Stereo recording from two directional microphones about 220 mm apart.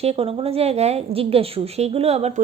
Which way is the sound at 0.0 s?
25° right (ahead or behind).